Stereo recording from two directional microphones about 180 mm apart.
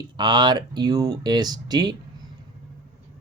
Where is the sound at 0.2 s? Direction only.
25° right (ahead or behind).